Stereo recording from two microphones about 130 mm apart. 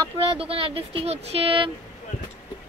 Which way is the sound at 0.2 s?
45° right (ahead or behind).